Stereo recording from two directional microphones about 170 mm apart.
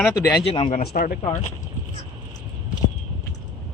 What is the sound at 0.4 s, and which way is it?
Speech, 35° left (ahead or behind).